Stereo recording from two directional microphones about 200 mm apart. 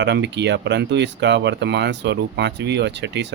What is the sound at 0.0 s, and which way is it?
Speech, 60° right (ahead or behind).